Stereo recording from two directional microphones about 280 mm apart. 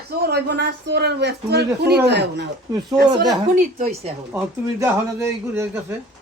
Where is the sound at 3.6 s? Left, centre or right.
Right.